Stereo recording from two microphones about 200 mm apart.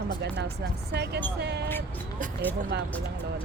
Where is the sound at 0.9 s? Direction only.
55° right (ahead or behind).